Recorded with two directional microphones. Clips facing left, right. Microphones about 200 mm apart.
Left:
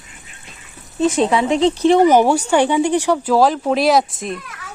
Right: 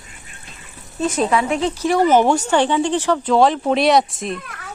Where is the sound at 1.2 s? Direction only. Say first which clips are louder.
Left 3 dB; 20° left (ahead or behind); by 4.4 s centre (ahead or behind).